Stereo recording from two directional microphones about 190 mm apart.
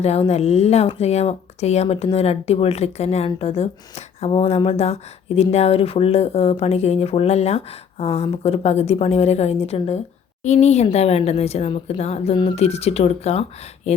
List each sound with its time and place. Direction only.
0.0 s speech: 35° left (ahead or behind)